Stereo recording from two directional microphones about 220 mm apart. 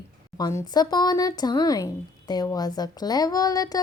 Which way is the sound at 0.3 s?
20° left (ahead or behind).